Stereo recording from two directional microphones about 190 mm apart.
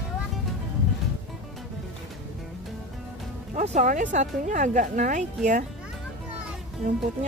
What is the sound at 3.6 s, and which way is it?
Speech, 40° right (ahead or behind).